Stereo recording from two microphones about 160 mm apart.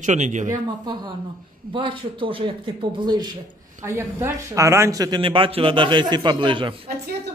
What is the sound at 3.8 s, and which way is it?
Speech, 15° right (ahead or behind).